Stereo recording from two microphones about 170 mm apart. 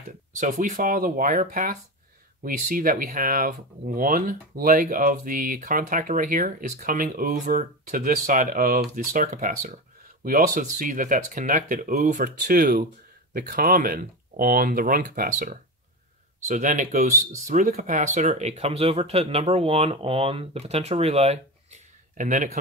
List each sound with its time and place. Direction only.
0.3 s speech: 50° right (ahead or behind)